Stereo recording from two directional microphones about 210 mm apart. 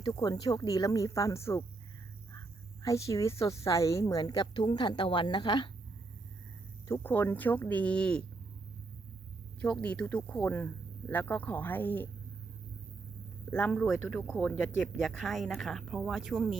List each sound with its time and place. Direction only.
0.0 s a woman's voice: 20° left (ahead or behind)
2.8 s a woman's voice: 15° left (ahead or behind)
6.8 s a woman's voice: 10° left (ahead or behind)
9.6 s a woman's voice: 5° left (ahead or behind)
13.5 s speech: 5° left (ahead or behind)